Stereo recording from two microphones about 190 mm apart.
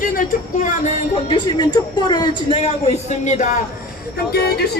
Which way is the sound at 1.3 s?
20° left (ahead or behind).